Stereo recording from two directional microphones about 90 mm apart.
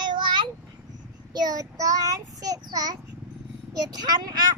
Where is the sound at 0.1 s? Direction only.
60° right (ahead or behind).